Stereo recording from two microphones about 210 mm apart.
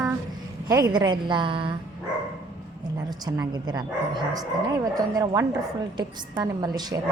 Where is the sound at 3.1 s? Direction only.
20° right (ahead or behind).